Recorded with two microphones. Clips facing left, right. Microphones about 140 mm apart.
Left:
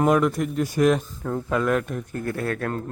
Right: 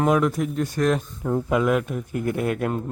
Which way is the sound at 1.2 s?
10° right (ahead or behind).